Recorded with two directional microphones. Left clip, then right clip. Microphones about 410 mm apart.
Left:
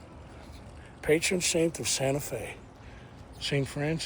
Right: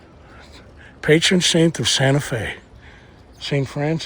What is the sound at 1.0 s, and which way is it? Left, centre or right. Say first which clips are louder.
Speech: right 11 dB; right.